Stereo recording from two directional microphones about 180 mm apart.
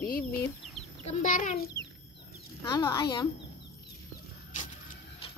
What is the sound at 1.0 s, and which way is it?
Speech, 45° left (ahead or behind).